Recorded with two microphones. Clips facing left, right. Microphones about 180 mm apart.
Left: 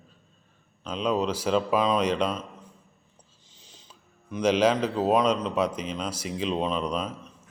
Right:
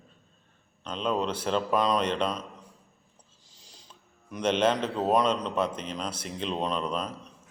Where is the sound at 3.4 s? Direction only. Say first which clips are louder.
Left 1 dB; 40° right (ahead or behind).